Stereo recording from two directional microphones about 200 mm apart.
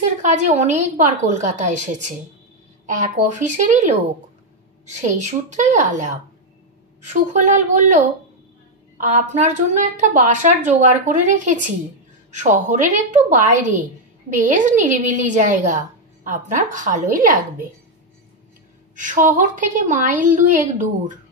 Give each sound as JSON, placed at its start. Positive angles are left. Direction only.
{"t": 0.0, "sound": "a woman's voice", "side_deg": -35}
{"t": 5.1, "sound": "a woman's voice", "side_deg": -35}
{"t": 7.1, "sound": "a woman's voice", "side_deg": -35}
{"t": 18.9, "sound": "a woman's voice", "side_deg": -40}